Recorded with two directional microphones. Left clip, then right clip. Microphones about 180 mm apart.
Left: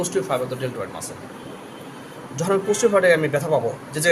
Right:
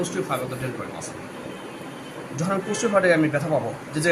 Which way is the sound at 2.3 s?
55° left (ahead or behind).